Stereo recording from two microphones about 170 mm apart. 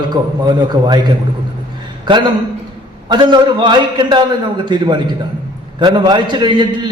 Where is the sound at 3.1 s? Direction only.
25° right (ahead or behind).